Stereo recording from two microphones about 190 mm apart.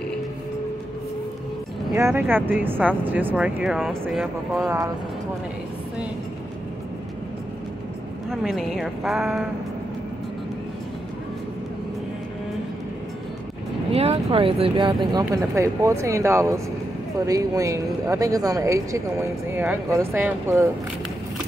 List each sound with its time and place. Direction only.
2.0 s speech: 15° right (ahead or behind)
4.6 s speech: 15° right (ahead or behind)
8.3 s speech: centre (ahead or behind)
13.9 s speech: 30° right (ahead or behind); by 20.7 s 15° right (ahead or behind)